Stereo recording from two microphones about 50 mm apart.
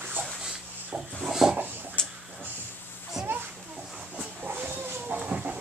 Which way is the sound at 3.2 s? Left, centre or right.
Right.